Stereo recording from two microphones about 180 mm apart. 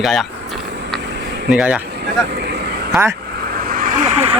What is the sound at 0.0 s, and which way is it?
Speech, centre (ahead or behind).